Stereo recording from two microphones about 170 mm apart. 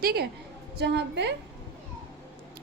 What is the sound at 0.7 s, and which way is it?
Speech, 80° right.